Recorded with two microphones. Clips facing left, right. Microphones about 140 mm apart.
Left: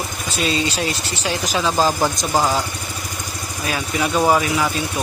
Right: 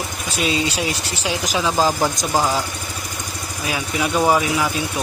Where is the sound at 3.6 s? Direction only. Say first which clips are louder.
Left 1 dB; 5° right (ahead or behind).